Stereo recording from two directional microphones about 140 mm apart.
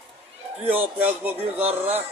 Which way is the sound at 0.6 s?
15° right (ahead or behind).